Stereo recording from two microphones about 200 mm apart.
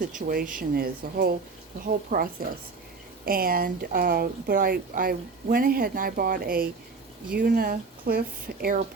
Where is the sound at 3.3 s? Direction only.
45° right (ahead or behind).